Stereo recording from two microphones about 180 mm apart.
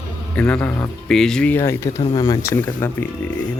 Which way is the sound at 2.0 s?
30° left (ahead or behind).